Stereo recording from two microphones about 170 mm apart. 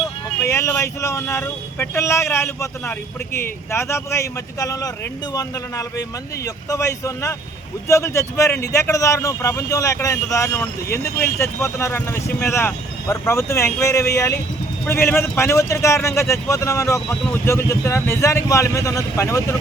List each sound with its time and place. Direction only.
0.4 s a man's voice: 20° left (ahead or behind)